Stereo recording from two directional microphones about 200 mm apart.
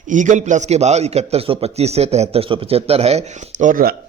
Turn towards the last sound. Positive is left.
turn(degrees=-40)  # may be behind; listen again after turning